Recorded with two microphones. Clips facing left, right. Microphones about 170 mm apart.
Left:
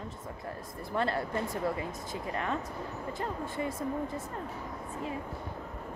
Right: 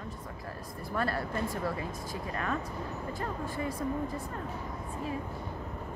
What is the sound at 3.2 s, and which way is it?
Speech, 20° left (ahead or behind).